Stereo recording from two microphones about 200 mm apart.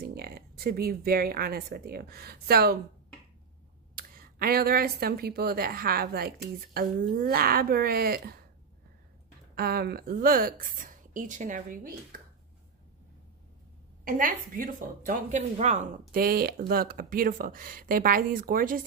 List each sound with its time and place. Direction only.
0.0 s speech: 50° right (ahead or behind)
3.9 s speech: 50° right (ahead or behind)
9.6 s speech: 50° right (ahead or behind)
14.0 s speech: 45° right (ahead or behind)